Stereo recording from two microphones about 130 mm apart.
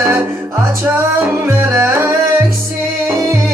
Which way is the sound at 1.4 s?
20° right (ahead or behind).